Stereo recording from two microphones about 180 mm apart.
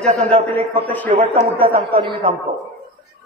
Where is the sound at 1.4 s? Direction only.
30° right (ahead or behind).